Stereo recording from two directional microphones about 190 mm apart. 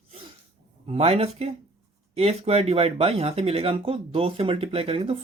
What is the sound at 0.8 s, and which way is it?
Speech, 30° right (ahead or behind).